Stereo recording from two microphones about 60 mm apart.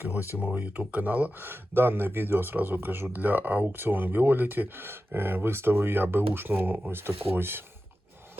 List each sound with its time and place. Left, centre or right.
0.0 s speech: right